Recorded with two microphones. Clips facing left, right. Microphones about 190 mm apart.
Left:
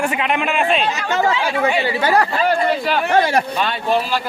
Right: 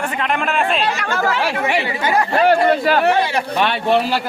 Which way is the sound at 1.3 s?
70° right (ahead or behind).